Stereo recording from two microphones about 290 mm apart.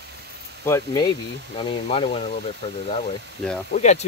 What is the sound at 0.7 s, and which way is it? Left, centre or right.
Speech, centre.